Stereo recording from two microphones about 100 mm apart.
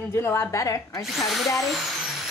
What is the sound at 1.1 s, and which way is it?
Speech, centre (ahead or behind).